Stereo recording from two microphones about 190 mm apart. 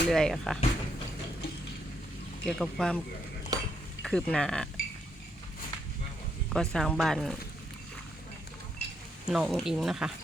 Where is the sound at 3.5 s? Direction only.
20° right (ahead or behind).